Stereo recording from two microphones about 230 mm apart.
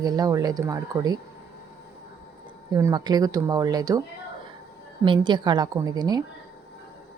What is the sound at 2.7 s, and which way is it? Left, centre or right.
Speech, centre.